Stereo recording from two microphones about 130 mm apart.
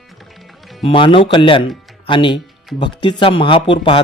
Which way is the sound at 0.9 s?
40° left (ahead or behind).